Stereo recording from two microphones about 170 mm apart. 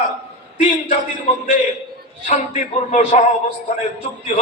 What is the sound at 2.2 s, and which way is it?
Speech, 45° left (ahead or behind).